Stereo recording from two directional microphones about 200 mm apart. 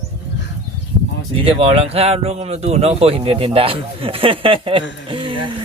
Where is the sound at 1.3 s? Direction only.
30° right (ahead or behind).